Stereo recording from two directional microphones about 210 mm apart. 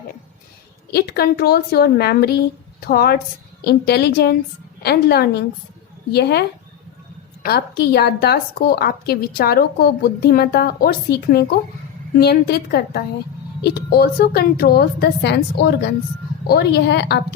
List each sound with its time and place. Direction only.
0.9 s a woman's voice: 50° left (ahead or behind)
7.4 s a woman's voice: 50° left (ahead or behind)